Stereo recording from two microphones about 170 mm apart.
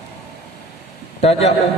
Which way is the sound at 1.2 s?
40° left (ahead or behind).